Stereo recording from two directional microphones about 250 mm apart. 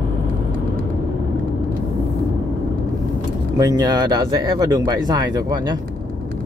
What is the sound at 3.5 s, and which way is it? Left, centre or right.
Speech, centre.